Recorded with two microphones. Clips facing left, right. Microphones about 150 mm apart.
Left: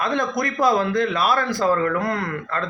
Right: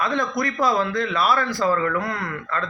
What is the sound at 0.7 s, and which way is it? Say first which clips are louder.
Speech: left 6 dB; 45° left (ahead or behind).